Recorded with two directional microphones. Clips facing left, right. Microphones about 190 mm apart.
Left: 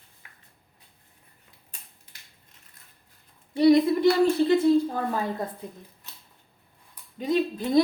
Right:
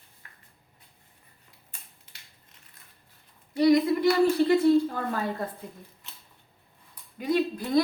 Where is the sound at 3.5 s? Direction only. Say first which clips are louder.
Left 2 dB; 25° left (ahead or behind).